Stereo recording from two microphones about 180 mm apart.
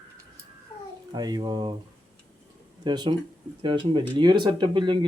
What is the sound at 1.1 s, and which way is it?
Speech, 20° right (ahead or behind).